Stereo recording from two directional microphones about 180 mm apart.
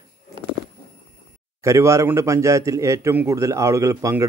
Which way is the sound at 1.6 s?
15° right (ahead or behind).